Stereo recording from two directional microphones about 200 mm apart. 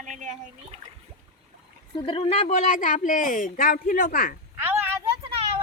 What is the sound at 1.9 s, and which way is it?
Speech, 25° left (ahead or behind).